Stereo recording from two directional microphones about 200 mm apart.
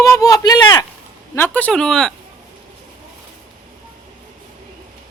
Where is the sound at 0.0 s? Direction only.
15° left (ahead or behind).